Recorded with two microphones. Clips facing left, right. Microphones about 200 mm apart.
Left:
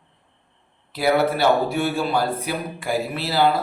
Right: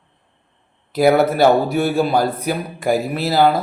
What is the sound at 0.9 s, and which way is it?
A man's voice, 45° right (ahead or behind).